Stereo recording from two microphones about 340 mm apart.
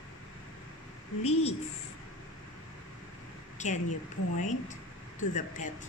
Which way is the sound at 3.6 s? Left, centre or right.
Left.